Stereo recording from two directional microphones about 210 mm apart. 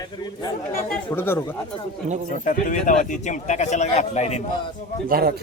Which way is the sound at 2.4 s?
40° left (ahead or behind).